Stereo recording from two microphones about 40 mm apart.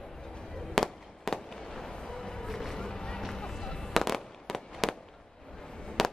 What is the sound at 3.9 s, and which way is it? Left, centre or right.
Fireworks, centre.